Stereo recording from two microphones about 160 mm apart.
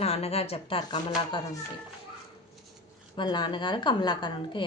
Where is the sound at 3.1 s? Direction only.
30° left (ahead or behind).